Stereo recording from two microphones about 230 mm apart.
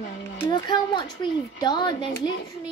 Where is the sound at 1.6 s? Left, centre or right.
Centre.